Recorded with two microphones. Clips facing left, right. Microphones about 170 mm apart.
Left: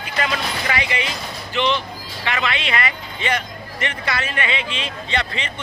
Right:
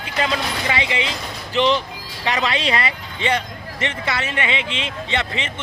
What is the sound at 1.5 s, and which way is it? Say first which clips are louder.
A man's voice: right 3 dB; 35° right (ahead or behind).